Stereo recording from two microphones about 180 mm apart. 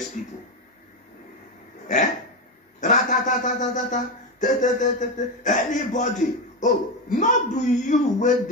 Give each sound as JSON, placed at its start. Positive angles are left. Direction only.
{"t": 0.2, "sound": "speech", "side_deg": 45}
{"t": 2.8, "sound": "speech", "side_deg": 45}